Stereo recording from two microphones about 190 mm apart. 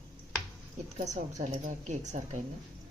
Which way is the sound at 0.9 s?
40° right (ahead or behind).